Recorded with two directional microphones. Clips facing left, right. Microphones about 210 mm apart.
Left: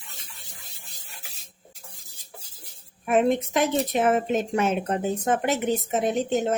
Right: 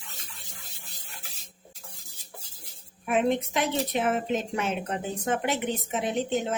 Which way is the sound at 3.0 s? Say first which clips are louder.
Left 4 dB; 45° left (ahead or behind).